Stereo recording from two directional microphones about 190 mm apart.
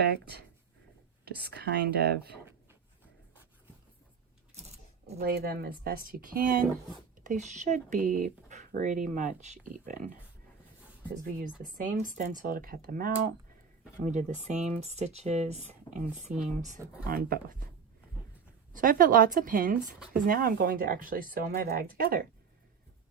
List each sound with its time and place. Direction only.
1.2 s speech: 55° right (ahead or behind)
4.5 s coin: 35° right (ahead or behind)
5.2 s speech: 55° right (ahead or behind)
11.1 s speech: 50° right (ahead or behind)
17.0 s speech: 50° right (ahead or behind)
18.7 s speech: 45° right (ahead or behind)